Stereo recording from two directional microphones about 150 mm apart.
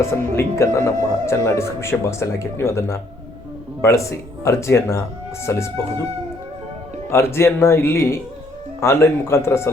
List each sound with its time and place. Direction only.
0.0 s speech: 20° left (ahead or behind)
7.1 s speech: 15° left (ahead or behind)